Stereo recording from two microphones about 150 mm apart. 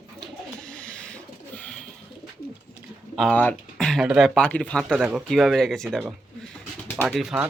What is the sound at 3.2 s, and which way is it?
Speech, 10° left (ahead or behind).